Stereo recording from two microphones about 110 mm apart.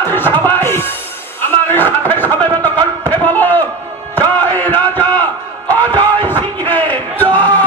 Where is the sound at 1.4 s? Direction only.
20° left (ahead or behind).